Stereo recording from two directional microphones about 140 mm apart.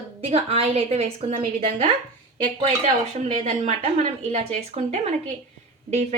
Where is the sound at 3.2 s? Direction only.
60° right (ahead or behind).